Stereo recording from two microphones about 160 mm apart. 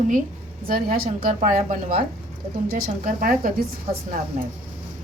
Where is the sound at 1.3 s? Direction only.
50° right (ahead or behind).